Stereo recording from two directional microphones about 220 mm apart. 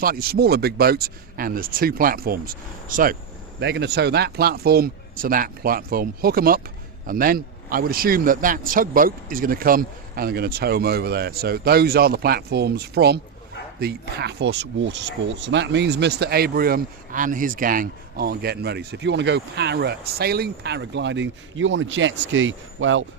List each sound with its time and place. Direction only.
0.0 s speech: 45° right (ahead or behind); by 23.0 s 60° right (ahead or behind)